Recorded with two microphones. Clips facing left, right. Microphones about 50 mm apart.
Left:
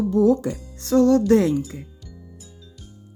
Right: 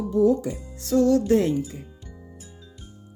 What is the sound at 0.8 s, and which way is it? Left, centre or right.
Speech, left.